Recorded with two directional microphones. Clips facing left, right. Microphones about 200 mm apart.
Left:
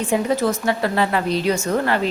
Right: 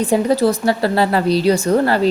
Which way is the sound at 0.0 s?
35° right (ahead or behind).